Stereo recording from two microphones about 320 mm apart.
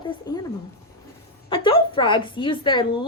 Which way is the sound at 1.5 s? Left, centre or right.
Centre.